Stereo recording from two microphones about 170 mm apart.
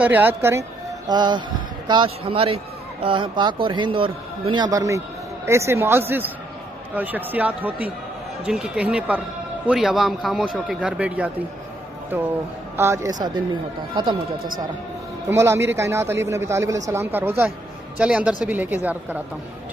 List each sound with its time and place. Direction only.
0.0 s a man's voice: 10° right (ahead or behind)
15.2 s speech: 15° right (ahead or behind)